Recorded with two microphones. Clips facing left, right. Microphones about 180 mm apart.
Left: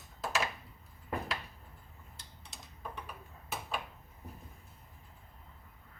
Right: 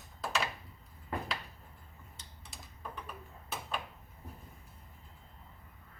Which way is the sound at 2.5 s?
Centre (ahead or behind).